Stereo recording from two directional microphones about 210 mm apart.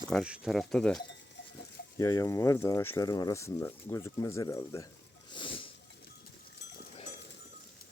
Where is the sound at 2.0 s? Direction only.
15° left (ahead or behind).